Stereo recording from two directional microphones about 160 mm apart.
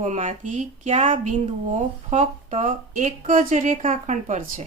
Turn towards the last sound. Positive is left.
turn(degrees=-55)  # may be behind; listen again after turning